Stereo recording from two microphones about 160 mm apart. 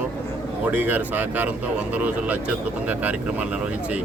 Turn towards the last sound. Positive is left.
turn(degrees=-10)  # may be behind; listen again after turning